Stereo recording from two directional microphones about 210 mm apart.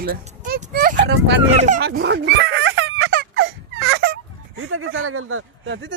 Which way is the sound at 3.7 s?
65° right (ahead or behind).